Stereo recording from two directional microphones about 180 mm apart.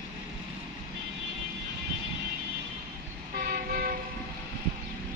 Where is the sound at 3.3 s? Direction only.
55° right (ahead or behind).